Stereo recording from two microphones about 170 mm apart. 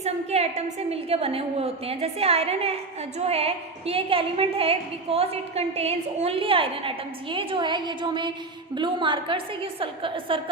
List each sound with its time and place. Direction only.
0.0 s a woman's voice: 40° right (ahead or behind)